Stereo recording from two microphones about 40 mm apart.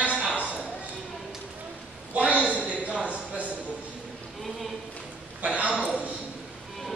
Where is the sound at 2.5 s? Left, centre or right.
Left.